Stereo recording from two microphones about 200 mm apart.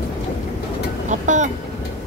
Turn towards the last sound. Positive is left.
turn(degrees=-35)  # may be behind; listen again after turning